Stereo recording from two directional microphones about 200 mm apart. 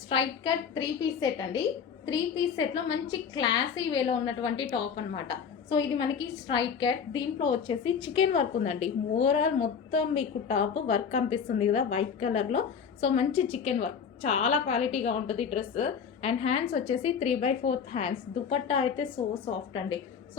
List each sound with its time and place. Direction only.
0.1 s a woman's voice: 25° left (ahead or behind)